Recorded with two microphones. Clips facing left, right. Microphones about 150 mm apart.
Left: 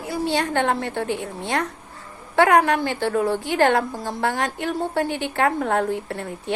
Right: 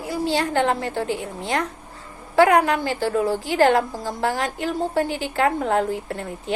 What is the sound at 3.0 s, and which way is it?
A woman's voice, 35° right (ahead or behind).